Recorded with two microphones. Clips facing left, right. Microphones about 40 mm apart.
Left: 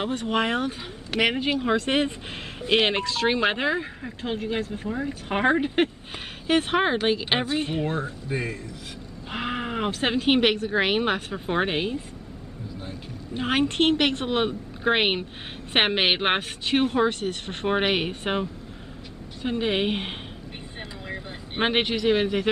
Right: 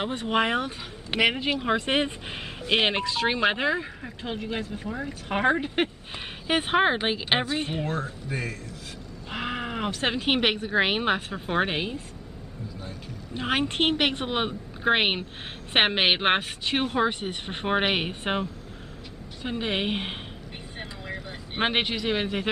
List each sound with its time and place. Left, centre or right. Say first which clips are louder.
0.1 s speech: right 2 dB; centre
1.2 s speech: left 1 dB; centre
2.9 s speech: left 1 dB; centre
3.3 s speech: left 1 dB; centre
6.4 s speech: even; centre
7.8 s speech: left 2 dB; centre
9.3 s sheep: left 2 dB; centre
10.1 s speech: left 5 dB; centre
13.4 s speech: left 3 dB; centre